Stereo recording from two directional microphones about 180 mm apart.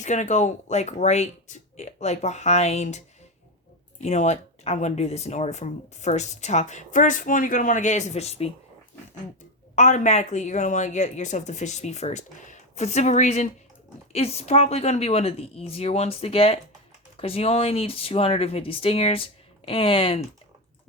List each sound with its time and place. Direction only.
0.0 s speech: 40° left (ahead or behind)
4.0 s speech: 40° left (ahead or behind)
9.7 s speech: 40° left (ahead or behind)